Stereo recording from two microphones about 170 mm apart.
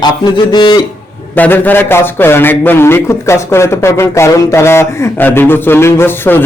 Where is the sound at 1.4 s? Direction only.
10° left (ahead or behind).